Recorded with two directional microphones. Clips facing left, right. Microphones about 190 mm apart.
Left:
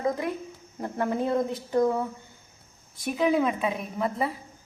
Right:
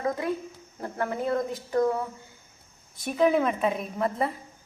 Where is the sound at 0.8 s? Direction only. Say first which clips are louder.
Left 2 dB; 20° left (ahead or behind).